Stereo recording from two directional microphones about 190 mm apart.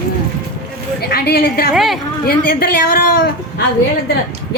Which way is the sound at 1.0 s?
55° left (ahead or behind).